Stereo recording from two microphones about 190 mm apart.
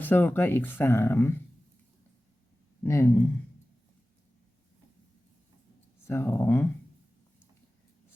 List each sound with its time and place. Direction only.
0.0 s speech: 10° left (ahead or behind)
2.8 s speech: 15° left (ahead or behind)
6.1 s speech: 10° left (ahead or behind)